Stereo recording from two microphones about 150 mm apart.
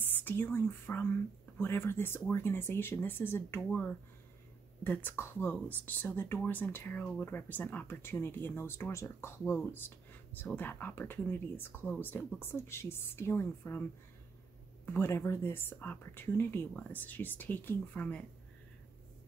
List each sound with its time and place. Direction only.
0.1 s speech: 15° left (ahead or behind)
14.9 s speech: 15° left (ahead or behind)